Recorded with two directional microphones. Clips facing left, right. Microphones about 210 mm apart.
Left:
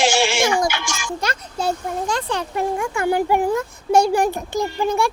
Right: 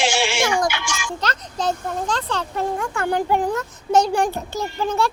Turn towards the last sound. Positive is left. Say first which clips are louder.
# left 2 dB
turn(degrees=10)  # may be behind; listen again after turning